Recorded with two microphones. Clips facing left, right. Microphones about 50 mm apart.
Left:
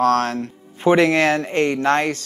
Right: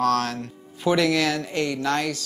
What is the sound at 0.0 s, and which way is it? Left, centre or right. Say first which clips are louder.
A man's voice: left 5 dB; left.